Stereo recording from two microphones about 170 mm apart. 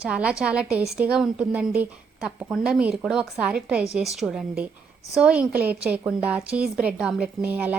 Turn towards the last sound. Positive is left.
turn(degrees=-10)  # may be behind; listen again after turning